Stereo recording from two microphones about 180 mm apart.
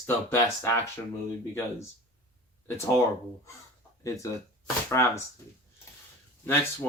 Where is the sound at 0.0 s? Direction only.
15° left (ahead or behind).